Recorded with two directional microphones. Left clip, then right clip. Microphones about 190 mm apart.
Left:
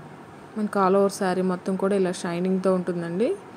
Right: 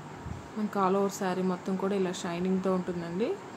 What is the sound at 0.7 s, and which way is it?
A woman's voice, 30° left (ahead or behind).